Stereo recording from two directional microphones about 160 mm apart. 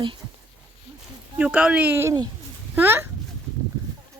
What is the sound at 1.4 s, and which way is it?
Speech, 5° right (ahead or behind).